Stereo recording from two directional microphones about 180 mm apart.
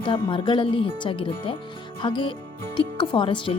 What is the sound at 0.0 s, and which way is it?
Speech, 30° left (ahead or behind).